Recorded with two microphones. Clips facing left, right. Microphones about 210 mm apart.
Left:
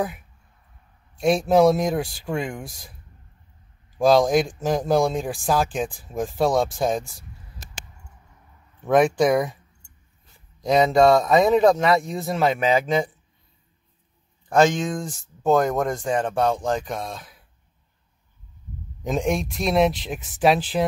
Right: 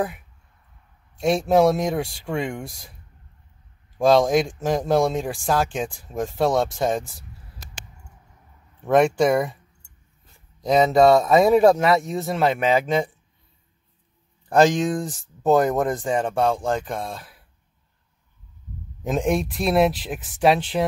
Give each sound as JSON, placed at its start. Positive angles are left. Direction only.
{"t": 1.2, "sound": "speech", "side_deg": 0}
{"t": 4.0, "sound": "speech", "side_deg": 0}
{"t": 8.8, "sound": "speech", "side_deg": 0}
{"t": 10.6, "sound": "speech", "side_deg": 0}
{"t": 14.5, "sound": "speech", "side_deg": -35}
{"t": 15.4, "sound": "speech", "side_deg": -5}
{"t": 19.0, "sound": "speech", "side_deg": 0}